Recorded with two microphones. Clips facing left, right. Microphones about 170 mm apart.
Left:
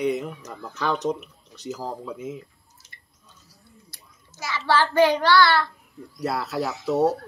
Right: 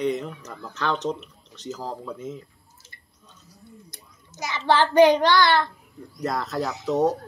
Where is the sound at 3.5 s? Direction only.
20° right (ahead or behind).